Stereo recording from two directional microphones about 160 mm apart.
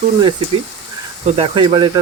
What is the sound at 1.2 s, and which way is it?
Speech, 35° right (ahead or behind).